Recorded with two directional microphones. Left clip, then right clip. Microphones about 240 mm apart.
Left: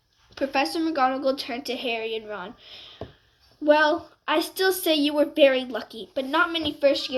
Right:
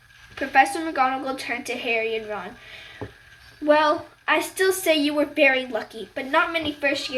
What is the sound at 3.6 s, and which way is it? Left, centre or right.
A woman's voice, left.